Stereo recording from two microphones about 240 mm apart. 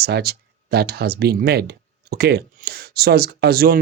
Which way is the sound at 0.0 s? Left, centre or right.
Right.